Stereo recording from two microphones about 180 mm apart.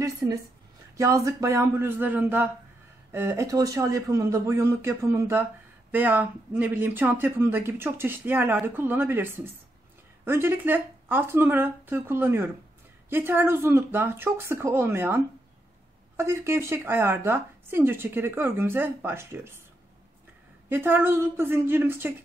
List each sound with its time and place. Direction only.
0.0 s a woman's voice: 20° right (ahead or behind)
20.6 s speech: 10° right (ahead or behind)